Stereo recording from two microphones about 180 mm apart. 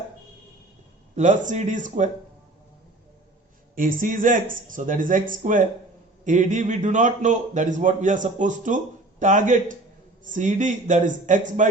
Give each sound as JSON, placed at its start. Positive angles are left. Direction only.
{"t": 1.1, "sound": "a man's voice", "side_deg": -45}
{"t": 3.8, "sound": "a man's voice", "side_deg": -50}